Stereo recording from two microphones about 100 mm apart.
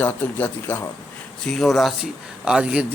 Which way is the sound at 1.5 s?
Centre (ahead or behind).